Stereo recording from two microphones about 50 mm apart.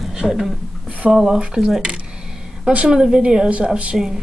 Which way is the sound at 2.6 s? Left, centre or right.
Centre.